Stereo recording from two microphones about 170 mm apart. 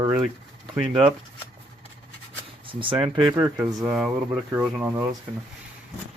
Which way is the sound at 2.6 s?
30° right (ahead or behind).